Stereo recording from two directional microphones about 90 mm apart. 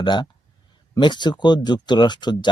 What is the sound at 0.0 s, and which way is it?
Speech, 55° left (ahead or behind).